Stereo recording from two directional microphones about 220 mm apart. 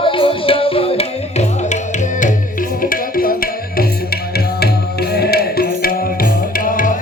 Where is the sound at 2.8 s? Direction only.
40° left (ahead or behind).